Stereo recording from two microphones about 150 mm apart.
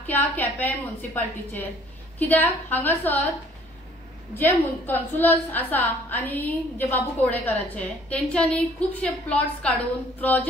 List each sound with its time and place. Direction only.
0.0 s a woman's voice: 10° left (ahead or behind)
4.4 s a woman's voice: 15° left (ahead or behind)